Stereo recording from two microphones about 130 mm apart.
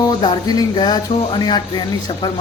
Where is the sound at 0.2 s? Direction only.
35° left (ahead or behind).